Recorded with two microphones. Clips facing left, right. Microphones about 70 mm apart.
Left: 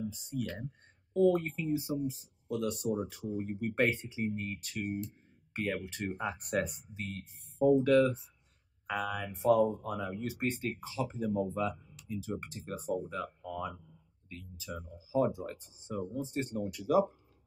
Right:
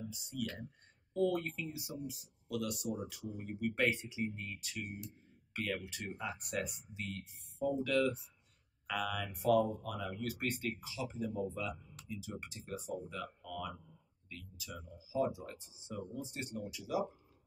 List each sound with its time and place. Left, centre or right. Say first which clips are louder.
0.1 s speech: left 4 dB; left
5.5 s speech: left 4 dB; left